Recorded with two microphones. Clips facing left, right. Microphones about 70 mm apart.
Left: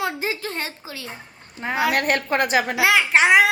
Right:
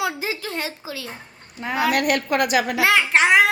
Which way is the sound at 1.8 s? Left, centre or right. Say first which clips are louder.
Right 1 dB; left.